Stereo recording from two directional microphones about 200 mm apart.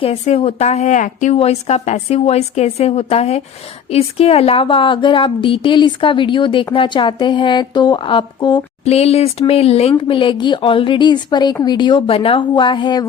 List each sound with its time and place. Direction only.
0.0 s a woman's voice: 30° left (ahead or behind)
8.8 s a woman's voice: 30° left (ahead or behind)